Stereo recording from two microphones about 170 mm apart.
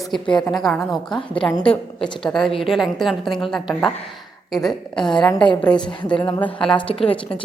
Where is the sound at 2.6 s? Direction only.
Centre (ahead or behind).